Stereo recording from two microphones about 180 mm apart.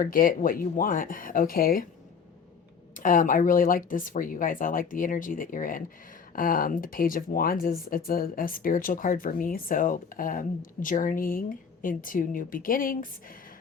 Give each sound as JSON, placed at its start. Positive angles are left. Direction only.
{"t": 0.0, "sound": "speech", "side_deg": 50}
{"t": 2.9, "sound": "speech", "side_deg": 50}